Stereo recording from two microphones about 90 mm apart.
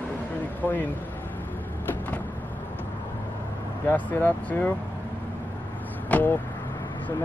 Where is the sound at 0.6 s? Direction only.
20° left (ahead or behind).